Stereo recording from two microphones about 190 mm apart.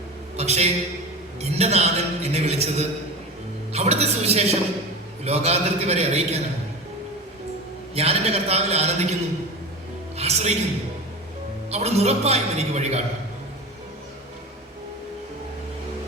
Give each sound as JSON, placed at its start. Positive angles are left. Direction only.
{"t": 0.3, "sound": "a man's voice", "side_deg": -35}
{"t": 7.9, "sound": "a man's voice", "side_deg": -30}
{"t": 10.2, "sound": "music", "side_deg": -35}
{"t": 11.7, "sound": "a man's voice", "side_deg": -35}